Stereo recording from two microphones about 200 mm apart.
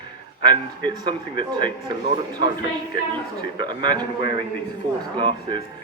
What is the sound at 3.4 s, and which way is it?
A man's voice, 20° right (ahead or behind).